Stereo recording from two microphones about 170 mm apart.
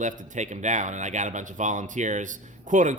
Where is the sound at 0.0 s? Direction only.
45° right (ahead or behind).